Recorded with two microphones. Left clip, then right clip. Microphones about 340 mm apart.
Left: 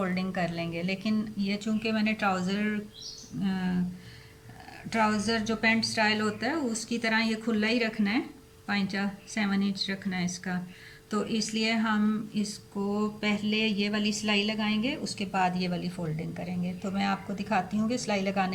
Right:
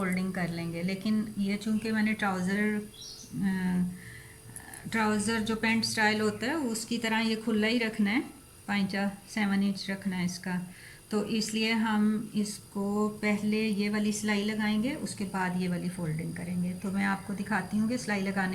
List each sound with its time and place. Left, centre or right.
0.0 s speech: centre
4.9 s speech: centre